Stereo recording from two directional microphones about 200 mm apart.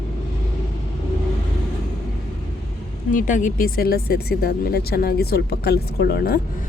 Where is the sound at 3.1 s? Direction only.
40° left (ahead or behind).